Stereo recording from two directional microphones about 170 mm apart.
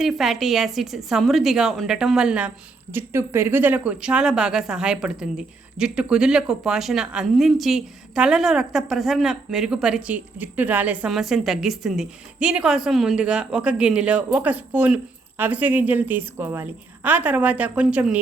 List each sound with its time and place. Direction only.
0.0 s speech: centre (ahead or behind)